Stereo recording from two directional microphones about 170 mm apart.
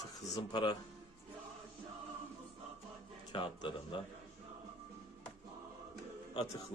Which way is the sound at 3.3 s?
30° left (ahead or behind).